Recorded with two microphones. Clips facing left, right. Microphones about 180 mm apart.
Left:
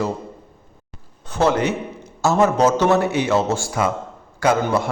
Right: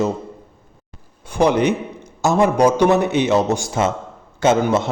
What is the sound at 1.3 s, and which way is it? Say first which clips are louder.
A man's voice: right 3 dB; 15° right (ahead or behind).